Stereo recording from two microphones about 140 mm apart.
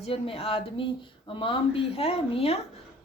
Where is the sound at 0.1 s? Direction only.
40° left (ahead or behind).